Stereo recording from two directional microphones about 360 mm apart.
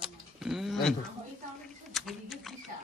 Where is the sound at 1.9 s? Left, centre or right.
Centre.